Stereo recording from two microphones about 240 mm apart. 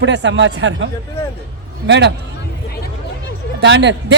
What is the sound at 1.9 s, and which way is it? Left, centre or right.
Speech, right.